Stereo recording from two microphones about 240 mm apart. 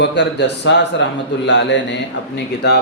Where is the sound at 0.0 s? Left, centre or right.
Left.